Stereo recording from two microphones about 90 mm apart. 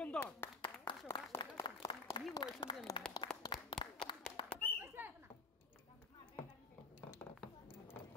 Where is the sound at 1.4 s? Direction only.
50° left (ahead or behind).